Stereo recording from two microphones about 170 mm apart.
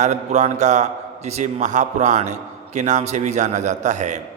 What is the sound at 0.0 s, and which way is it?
A man's voice, 45° right (ahead or behind).